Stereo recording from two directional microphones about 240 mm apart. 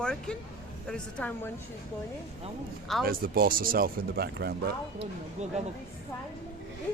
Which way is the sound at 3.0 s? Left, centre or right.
Right.